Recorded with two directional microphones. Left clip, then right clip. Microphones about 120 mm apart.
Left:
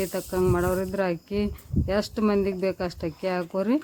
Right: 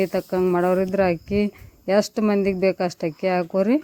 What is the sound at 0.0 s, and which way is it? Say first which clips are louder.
Speech: right 4 dB; 35° right (ahead or behind).